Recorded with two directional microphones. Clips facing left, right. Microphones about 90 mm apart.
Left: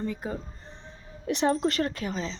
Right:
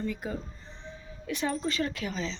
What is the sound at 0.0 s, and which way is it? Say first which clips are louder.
Speech: left 2 dB; 30° left (ahead or behind).